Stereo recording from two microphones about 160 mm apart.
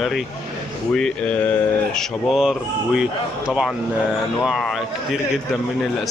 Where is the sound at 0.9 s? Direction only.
5° left (ahead or behind).